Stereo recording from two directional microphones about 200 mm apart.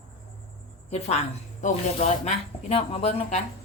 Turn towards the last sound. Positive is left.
turn(degrees=30)  # may be behind; listen again after turning